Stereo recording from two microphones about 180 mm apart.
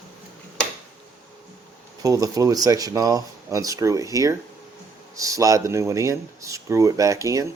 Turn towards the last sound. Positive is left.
turn(degrees=-20)  # may be behind; listen again after turning